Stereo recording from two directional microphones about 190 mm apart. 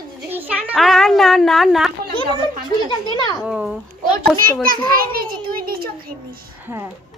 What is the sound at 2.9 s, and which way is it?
Speech, 25° left (ahead or behind).